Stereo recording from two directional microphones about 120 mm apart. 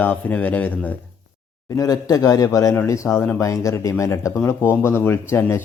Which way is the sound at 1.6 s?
30° left (ahead or behind).